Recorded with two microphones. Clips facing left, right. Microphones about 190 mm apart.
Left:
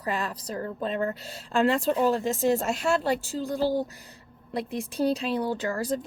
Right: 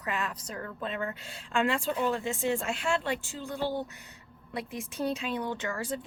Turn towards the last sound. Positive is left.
turn(degrees=40)  # may be behind; listen again after turning